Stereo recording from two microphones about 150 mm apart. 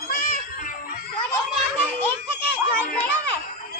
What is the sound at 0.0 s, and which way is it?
Music, 70° left (ahead or behind).